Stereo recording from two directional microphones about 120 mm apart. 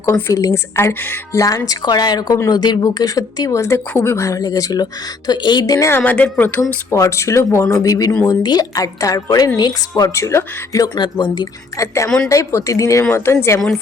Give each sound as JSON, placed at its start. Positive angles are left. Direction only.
{"t": 0.0, "sound": "speech", "side_deg": 25}
{"t": 6.0, "sound": "speech", "side_deg": 10}
{"t": 6.6, "sound": "speech", "side_deg": 25}
{"t": 10.9, "sound": "speech", "side_deg": 40}
{"t": 12.0, "sound": "speech", "side_deg": 5}
{"t": 12.3, "sound": "speech", "side_deg": 25}